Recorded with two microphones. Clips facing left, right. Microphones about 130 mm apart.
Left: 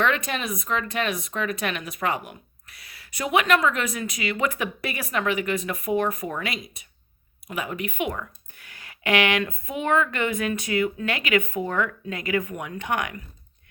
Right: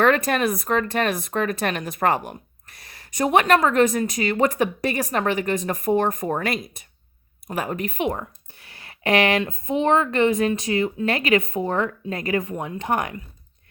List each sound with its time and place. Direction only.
0.0 s speech: 45° right (ahead or behind)